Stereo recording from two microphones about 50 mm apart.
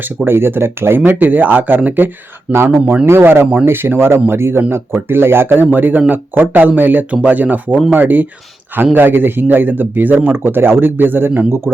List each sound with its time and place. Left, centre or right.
0.3 s speech: right
2.5 s speech: right
3.1 s speech: right
10.3 s speech: right